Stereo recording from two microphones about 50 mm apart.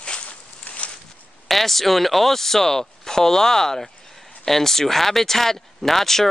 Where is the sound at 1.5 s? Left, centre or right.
Centre.